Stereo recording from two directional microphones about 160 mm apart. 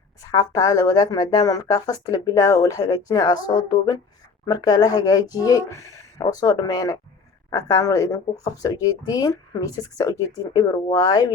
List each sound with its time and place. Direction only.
0.2 s speech: 20° left (ahead or behind)